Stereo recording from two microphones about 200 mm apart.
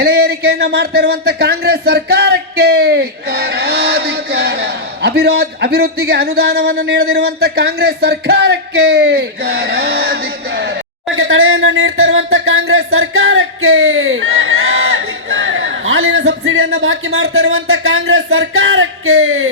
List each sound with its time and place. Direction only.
0.0 s speech: 55° right (ahead or behind)
11.2 s speech: 85° right